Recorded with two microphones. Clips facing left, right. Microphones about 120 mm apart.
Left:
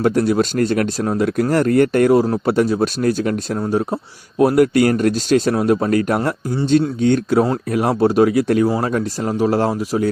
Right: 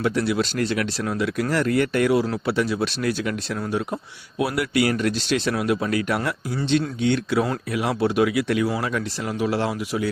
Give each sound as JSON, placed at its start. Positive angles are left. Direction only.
{"t": 0.0, "sound": "speech", "side_deg": 45}